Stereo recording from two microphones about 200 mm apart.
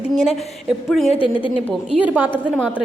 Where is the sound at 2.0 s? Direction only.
10° right (ahead or behind).